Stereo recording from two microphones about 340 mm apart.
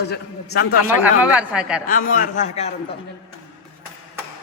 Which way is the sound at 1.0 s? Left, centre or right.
Centre.